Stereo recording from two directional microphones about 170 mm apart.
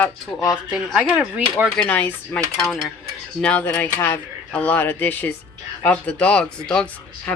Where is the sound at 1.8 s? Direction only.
10° left (ahead or behind).